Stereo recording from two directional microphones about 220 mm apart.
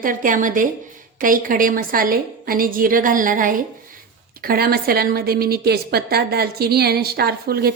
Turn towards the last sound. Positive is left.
turn(degrees=-45)  # may be behind; listen again after turning